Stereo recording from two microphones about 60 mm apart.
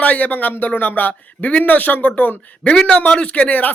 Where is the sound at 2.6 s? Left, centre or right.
Centre.